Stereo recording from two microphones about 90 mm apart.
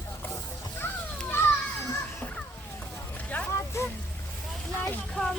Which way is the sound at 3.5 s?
30° left (ahead or behind).